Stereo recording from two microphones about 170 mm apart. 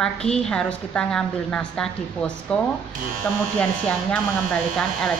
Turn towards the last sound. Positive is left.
turn(degrees=5)  # may be behind; listen again after turning